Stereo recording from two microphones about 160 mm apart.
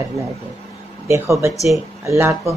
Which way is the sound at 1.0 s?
15° right (ahead or behind).